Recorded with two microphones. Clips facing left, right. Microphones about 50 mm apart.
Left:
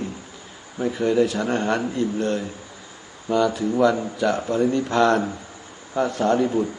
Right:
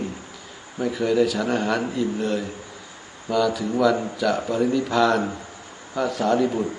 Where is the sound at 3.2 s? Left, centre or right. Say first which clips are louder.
Left 1 dB; centre.